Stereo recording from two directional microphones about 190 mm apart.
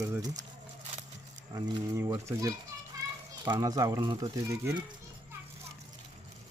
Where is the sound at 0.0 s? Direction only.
15° right (ahead or behind).